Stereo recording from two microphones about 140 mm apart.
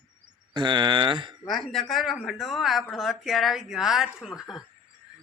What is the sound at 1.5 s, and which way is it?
Speech, centre (ahead or behind).